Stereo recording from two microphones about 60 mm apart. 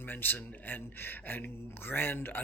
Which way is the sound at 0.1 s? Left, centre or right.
Left.